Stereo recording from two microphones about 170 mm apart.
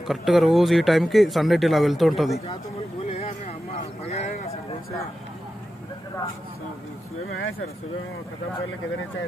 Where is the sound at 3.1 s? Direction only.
40° left (ahead or behind).